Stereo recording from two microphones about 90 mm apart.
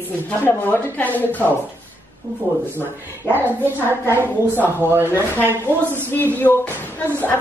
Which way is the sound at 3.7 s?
25° right (ahead or behind).